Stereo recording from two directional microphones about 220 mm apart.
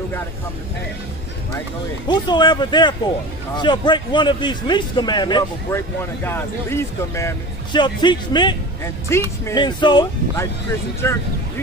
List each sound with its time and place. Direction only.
2.0 s a man's voice: 20° left (ahead or behind)